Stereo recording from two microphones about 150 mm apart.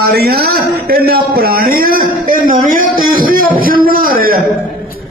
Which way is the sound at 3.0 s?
75° right (ahead or behind).